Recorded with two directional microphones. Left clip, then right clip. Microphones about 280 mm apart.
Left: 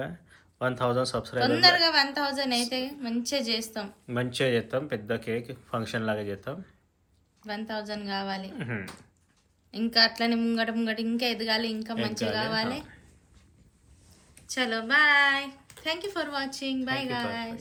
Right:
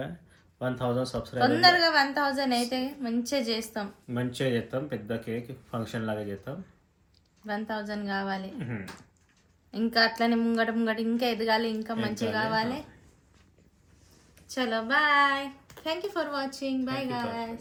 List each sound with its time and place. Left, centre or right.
0.0 s speech: centre
1.4 s a woman's voice: centre
4.0 s speech: centre
7.4 s a woman's voice: centre
8.5 s speech: centre
9.7 s a woman's voice: centre
14.5 s a woman's voice: centre